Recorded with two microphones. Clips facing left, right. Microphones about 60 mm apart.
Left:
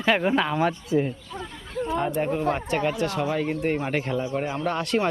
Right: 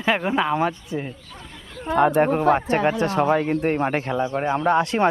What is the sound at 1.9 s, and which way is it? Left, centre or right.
Speech, right.